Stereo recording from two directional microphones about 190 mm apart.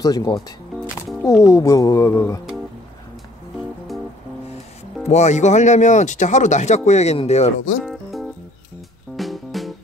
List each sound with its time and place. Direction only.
0.0 s speech: 20° left (ahead or behind)
1.4 s speech: 15° left (ahead or behind)
5.0 s speech: 35° left (ahead or behind)
7.8 s music: centre (ahead or behind)